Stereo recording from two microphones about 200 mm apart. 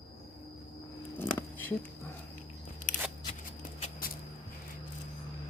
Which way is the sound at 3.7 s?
35° left (ahead or behind).